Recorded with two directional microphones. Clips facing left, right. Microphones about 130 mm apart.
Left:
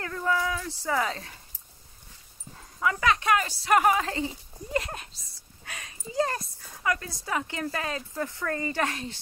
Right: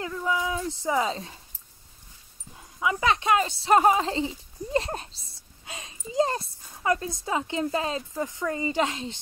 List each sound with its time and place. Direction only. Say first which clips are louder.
0.0 s speech: even; 10° right (ahead or behind)
0.5 s speech: right 2 dB; 20° right (ahead or behind)
2.5 s dog: right 1 dB; 15° right (ahead or behind)
3.1 s speech: right 2 dB; 25° right (ahead or behind)